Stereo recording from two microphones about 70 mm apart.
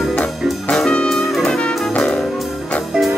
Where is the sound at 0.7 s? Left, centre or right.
Centre.